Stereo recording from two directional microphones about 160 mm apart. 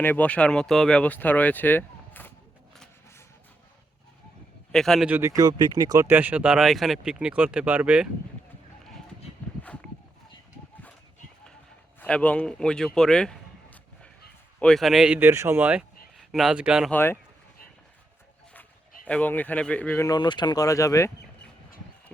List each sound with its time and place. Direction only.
0.0 s speech: 10° left (ahead or behind)
4.7 s speech: centre (ahead or behind)
5.0 s speech: 15° right (ahead or behind)
6.1 s speech: 10° right (ahead or behind)
11.9 s speech: 10° left (ahead or behind); by 15.8 s 10° right (ahead or behind)
16.1 s speech: centre (ahead or behind)
16.9 s speech: 15° left (ahead or behind)
19.0 s speech: 10° left (ahead or behind)
20.1 s speech: 25° left (ahead or behind)